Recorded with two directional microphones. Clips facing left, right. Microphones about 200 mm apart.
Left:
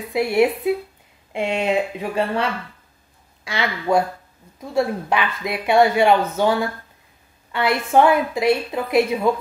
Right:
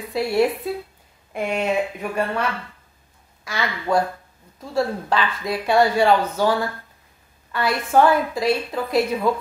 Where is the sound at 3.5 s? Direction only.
20° left (ahead or behind).